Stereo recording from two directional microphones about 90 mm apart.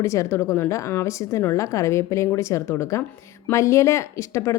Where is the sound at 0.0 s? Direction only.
35° left (ahead or behind).